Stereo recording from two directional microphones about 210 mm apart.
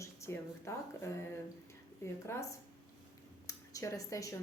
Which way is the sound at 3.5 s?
15° left (ahead or behind).